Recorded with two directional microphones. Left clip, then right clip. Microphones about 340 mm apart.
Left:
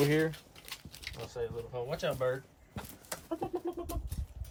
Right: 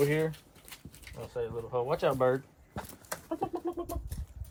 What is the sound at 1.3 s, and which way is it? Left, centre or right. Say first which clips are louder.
Speech: right 6 dB; centre.